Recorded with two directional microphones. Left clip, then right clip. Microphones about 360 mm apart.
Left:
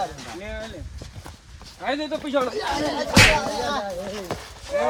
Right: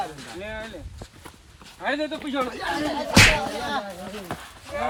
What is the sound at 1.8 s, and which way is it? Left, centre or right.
Speech, centre.